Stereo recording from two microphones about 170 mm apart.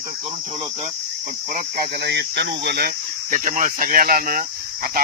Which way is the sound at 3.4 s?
50° right (ahead or behind).